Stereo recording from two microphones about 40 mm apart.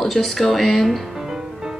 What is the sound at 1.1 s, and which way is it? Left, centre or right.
Music, centre.